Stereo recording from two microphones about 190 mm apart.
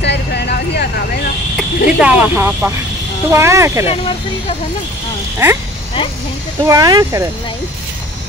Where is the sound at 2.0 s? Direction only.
5° right (ahead or behind).